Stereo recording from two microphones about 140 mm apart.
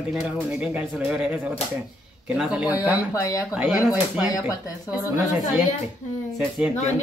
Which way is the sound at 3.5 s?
10° right (ahead or behind).